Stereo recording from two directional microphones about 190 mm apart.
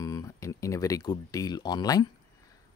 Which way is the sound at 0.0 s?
15° left (ahead or behind).